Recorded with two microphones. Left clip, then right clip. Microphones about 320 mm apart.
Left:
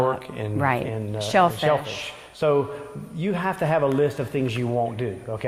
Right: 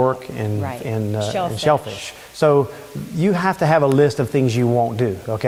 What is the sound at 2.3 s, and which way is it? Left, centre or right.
Speech, right.